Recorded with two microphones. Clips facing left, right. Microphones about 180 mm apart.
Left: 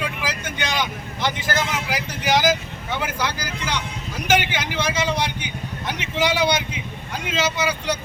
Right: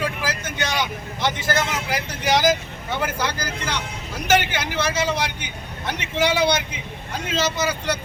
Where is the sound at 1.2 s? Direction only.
10° left (ahead or behind).